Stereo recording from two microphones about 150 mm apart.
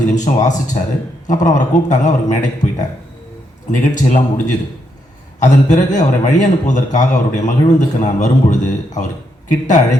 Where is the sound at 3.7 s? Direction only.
55° left (ahead or behind).